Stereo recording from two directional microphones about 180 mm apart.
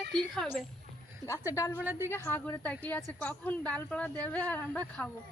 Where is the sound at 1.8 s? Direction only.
10° right (ahead or behind).